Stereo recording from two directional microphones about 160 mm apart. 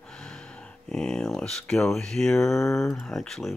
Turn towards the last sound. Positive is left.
turn(degrees=0)  # may be behind; listen again after turning